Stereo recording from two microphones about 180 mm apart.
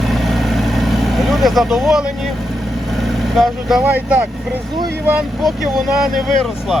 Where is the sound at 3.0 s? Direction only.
Centre (ahead or behind).